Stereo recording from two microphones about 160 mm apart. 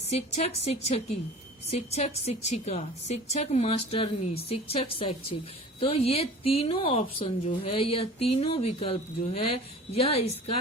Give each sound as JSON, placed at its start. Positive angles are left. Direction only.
{"t": 0.1, "sound": "speech", "side_deg": 40}